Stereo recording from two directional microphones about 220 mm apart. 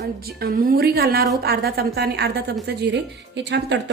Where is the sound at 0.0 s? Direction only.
45° right (ahead or behind).